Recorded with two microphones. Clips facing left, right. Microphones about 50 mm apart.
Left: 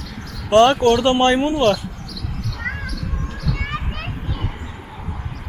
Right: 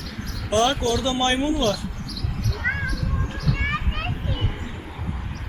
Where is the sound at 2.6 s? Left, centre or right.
Centre.